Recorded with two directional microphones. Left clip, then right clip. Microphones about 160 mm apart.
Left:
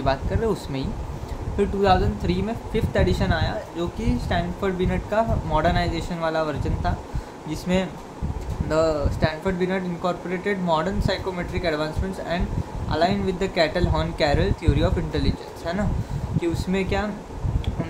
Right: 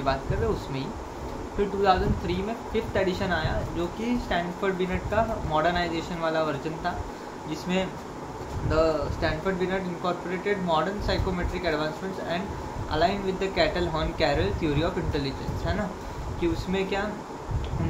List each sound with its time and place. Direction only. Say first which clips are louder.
1.8 s speech: left 3 dB; 45° left (ahead or behind)